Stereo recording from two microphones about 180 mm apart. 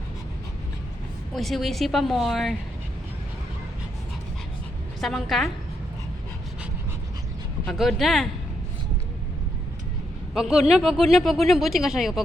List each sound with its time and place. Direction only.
1.3 s speech: centre (ahead or behind)
4.9 s speech: centre (ahead or behind)
7.7 s speech: centre (ahead or behind)
10.3 s speech: centre (ahead or behind)